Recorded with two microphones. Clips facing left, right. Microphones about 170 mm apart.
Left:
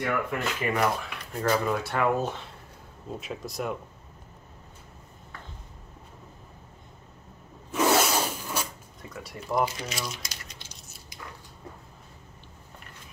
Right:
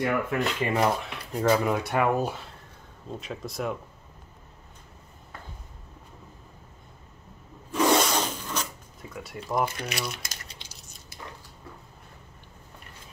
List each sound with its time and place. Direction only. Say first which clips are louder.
0.0 s speech: right 3 dB; 20° right (ahead or behind)
3.1 s speech: even; centre (ahead or behind)
7.7 s rub: right 1 dB; 5° left (ahead or behind)
9.1 s speech: even; centre (ahead or behind)
9.7 s speech: right 2 dB; 60° right (ahead or behind)
10.7 s a sound: left 1 dB; centre (ahead or behind)